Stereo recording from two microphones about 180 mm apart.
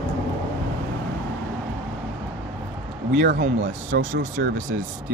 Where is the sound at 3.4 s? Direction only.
45° right (ahead or behind).